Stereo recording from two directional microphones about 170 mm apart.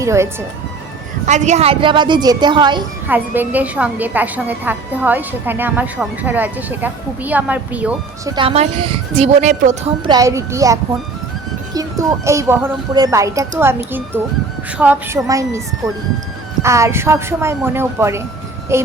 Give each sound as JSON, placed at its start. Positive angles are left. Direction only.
{"t": 0.0, "sound": "speech", "side_deg": -15}
{"t": 1.2, "sound": "a woman's voice", "side_deg": -45}
{"t": 3.1, "sound": "a woman's voice", "side_deg": -10}
{"t": 8.2, "sound": "a woman's voice", "side_deg": -20}
{"t": 8.4, "sound": "a woman's voice", "side_deg": -35}
{"t": 10.0, "sound": "a woman's voice", "side_deg": -25}
{"t": 16.6, "sound": "a woman's voice", "side_deg": -15}